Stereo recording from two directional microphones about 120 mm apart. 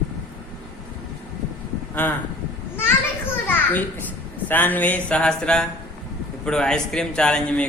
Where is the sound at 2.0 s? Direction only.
15° left (ahead or behind).